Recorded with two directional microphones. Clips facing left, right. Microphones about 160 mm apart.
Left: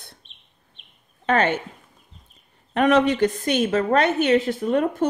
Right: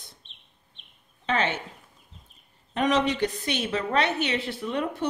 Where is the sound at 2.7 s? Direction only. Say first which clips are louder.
Left 6 dB; 60° left (ahead or behind).